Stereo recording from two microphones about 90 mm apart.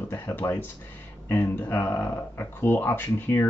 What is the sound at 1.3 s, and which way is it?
Speech, 25° left (ahead or behind).